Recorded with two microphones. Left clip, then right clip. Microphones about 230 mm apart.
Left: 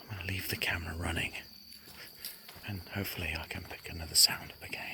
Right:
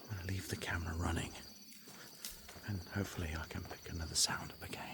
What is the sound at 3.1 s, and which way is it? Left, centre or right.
Speech, centre.